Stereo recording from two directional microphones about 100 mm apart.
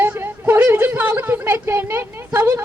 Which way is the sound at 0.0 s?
20° right (ahead or behind).